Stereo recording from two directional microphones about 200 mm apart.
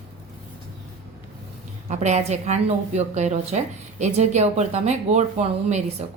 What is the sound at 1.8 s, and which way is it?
A woman's voice, 35° right (ahead or behind).